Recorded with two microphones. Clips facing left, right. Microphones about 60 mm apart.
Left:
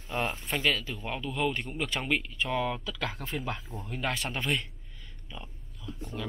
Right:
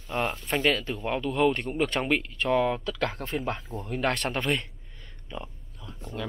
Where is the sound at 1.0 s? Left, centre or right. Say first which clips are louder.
Right 7 dB; right.